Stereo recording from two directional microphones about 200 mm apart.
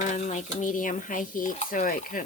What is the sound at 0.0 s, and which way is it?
Speech, 40° left (ahead or behind).